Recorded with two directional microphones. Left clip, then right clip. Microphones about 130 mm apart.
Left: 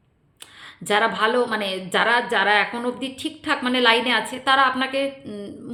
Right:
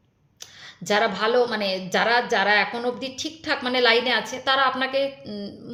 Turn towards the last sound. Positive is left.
turn(degrees=35)  # may be behind; listen again after turning